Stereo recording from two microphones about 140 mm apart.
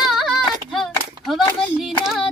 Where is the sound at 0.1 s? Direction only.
Centre (ahead or behind).